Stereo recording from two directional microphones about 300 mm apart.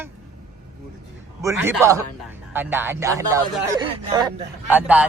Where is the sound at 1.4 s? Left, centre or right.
Centre.